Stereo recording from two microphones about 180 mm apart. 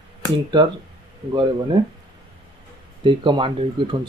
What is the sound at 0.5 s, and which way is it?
Speech, 25° right (ahead or behind).